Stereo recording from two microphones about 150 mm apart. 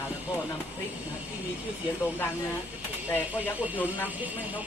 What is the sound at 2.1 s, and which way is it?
Speech, 15° left (ahead or behind).